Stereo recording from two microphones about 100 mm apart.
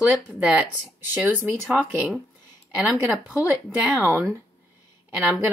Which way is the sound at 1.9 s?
15° right (ahead or behind).